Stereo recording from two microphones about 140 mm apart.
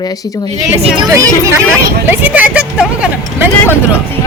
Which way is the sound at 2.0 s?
10° right (ahead or behind).